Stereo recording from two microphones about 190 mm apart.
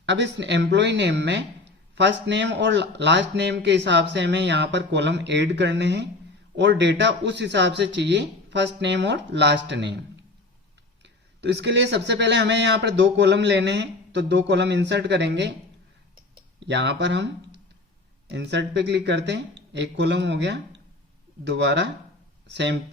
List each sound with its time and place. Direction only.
0.0 s a man's voice: 70° right (ahead or behind)
11.0 s speech: 65° right (ahead or behind)
16.6 s a man's voice: 65° right (ahead or behind)